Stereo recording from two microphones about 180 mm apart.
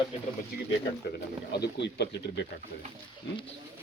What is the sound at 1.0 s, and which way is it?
Speech, 65° left (ahead or behind).